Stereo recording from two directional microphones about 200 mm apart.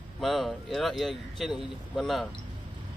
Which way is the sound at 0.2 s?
Centre (ahead or behind).